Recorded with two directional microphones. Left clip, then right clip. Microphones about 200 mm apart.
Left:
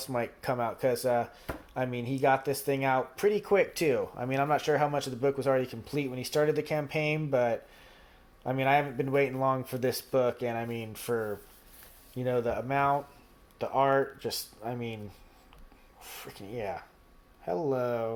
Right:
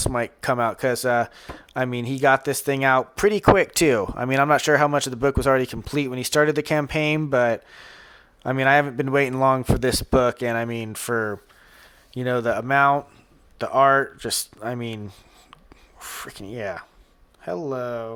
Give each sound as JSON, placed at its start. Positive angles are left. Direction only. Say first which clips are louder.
{"t": 0.0, "sound": "speech", "louder": "right 8 dB", "side_deg": -40}